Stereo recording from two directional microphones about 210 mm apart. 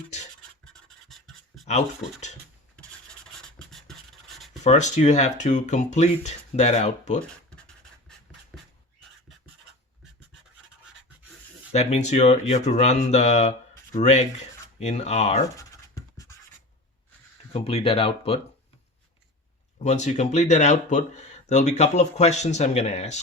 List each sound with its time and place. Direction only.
0.6 s scratch: centre (ahead or behind)
3.7 s writing: centre (ahead or behind)
4.6 s speech: 35° left (ahead or behind)
8.5 s a sound: centre (ahead or behind)
11.7 s speech: 30° left (ahead or behind)
15.5 s scratch: 15° left (ahead or behind)
17.5 s speech: 25° left (ahead or behind)
19.8 s speech: 35° left (ahead or behind)